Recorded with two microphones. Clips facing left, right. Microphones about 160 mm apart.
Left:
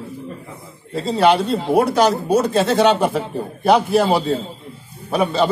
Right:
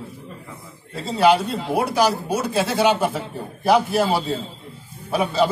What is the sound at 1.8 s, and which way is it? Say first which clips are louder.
A man's voice: left 4 dB; 10° right (ahead or behind).